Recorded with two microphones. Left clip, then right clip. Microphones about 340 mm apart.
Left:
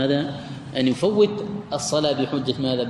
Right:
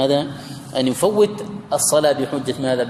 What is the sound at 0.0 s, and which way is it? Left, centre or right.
A man's voice, centre.